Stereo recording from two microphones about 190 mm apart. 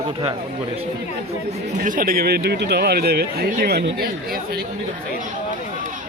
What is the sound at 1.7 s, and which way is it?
Speech, 45° right (ahead or behind).